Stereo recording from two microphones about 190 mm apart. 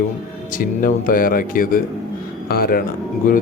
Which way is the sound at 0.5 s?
45° left (ahead or behind).